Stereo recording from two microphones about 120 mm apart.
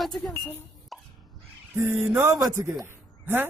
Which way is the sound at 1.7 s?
15° right (ahead or behind).